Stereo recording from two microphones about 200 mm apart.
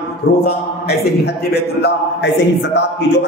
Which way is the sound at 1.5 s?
55° left (ahead or behind).